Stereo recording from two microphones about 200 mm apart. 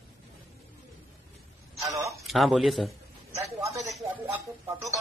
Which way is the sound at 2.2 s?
Centre (ahead or behind).